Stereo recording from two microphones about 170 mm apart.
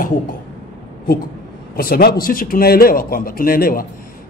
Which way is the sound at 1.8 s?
65° left (ahead or behind).